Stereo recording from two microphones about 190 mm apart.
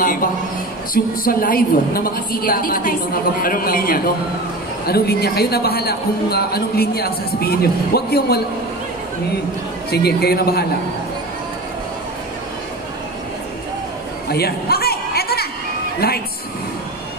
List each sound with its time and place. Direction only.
0.0 s a woman's voice: 50° left (ahead or behind)
9.8 s a man's voice: 55° left (ahead or behind)
14.3 s a sound: 55° left (ahead or behind)